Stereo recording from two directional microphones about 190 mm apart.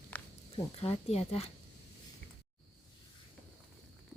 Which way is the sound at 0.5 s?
30° left (ahead or behind).